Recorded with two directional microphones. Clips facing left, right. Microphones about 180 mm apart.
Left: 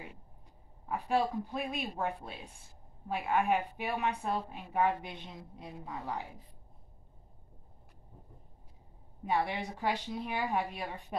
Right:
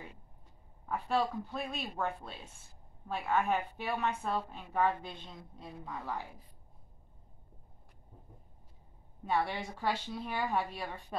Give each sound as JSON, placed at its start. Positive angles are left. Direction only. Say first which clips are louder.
{"t": 0.8, "sound": "speech", "louder": "left 1 dB", "side_deg": 10}
{"t": 9.2, "sound": "speech", "louder": "left 1 dB", "side_deg": 15}